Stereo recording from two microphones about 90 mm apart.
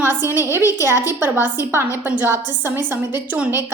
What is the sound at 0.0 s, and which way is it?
A woman's voice, 25° right (ahead or behind).